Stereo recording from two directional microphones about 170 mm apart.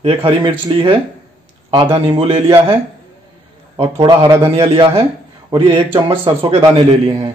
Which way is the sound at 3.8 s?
30° right (ahead or behind).